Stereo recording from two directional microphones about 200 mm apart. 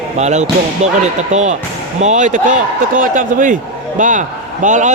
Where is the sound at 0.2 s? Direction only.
35° right (ahead or behind).